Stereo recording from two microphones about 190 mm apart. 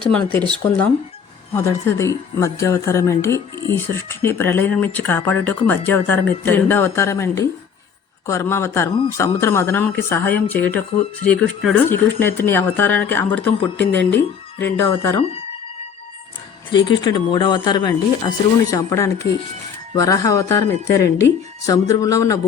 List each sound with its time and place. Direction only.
0.1 s speech: 5° left (ahead or behind)
1.5 s speech: 15° left (ahead or behind)
16.7 s speech: 20° left (ahead or behind)